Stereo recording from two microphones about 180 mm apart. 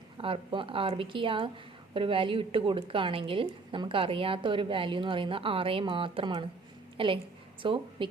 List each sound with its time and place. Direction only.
0.2 s a woman's voice: 30° right (ahead or behind)